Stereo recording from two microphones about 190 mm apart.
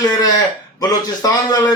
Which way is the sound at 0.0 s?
20° left (ahead or behind).